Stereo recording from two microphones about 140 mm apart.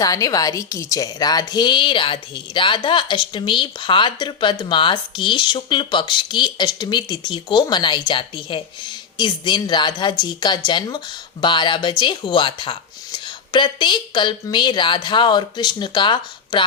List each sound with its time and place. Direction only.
0.0 s a woman's voice: 25° left (ahead or behind)